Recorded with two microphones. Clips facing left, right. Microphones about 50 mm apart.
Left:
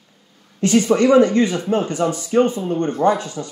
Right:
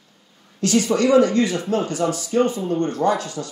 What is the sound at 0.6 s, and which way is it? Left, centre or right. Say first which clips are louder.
Speech: left 3 dB; left.